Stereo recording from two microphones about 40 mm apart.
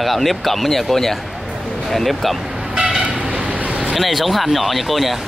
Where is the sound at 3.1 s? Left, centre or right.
Right.